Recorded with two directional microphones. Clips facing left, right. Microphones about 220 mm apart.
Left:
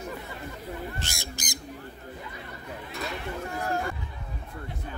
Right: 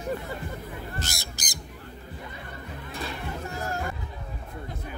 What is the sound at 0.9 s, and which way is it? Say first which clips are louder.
Bird: right 1 dB; 40° right (ahead or behind).